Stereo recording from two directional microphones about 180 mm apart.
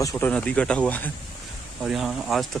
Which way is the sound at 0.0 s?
15° left (ahead or behind).